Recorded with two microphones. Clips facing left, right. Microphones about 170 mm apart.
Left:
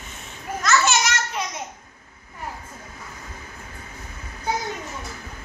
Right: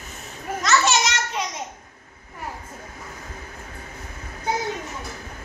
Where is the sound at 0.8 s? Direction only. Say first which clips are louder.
Even; 20° right (ahead or behind).